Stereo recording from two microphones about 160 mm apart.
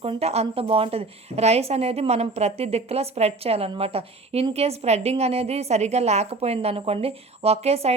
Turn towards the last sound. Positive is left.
turn(degrees=-40)  # may be behind; listen again after turning